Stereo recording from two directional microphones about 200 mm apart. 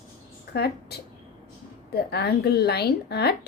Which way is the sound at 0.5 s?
55° left (ahead or behind).